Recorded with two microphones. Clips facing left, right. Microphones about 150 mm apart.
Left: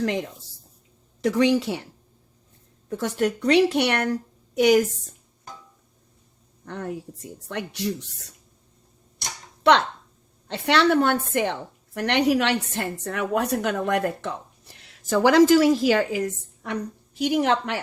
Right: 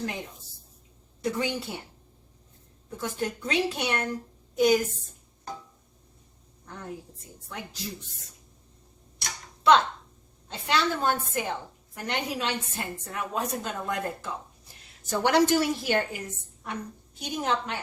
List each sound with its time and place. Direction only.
0.0 s a woman's voice: 90° left
2.9 s a woman's voice: 75° left (ahead or behind)
6.7 s a woman's voice: 70° left (ahead or behind)
9.7 s a woman's voice: 65° left (ahead or behind)
14.7 s a woman's voice: 90° left